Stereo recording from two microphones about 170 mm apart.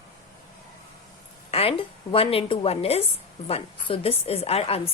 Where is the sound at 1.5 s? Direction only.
35° left (ahead or behind).